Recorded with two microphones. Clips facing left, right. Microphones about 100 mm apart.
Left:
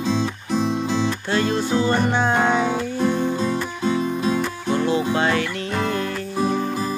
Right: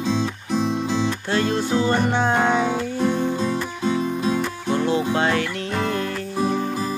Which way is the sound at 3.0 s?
Centre (ahead or behind).